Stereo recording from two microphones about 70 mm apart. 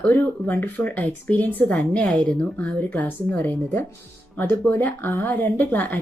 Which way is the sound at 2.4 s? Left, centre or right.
Left.